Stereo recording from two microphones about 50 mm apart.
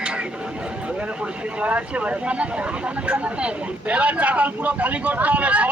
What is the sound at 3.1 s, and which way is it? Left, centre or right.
Speech, right.